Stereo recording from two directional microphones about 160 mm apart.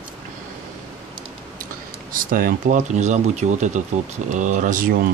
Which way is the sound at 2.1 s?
60° right (ahead or behind).